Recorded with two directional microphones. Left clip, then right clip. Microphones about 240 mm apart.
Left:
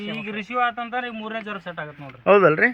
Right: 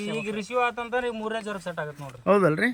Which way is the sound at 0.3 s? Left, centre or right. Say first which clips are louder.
Left 3 dB; centre.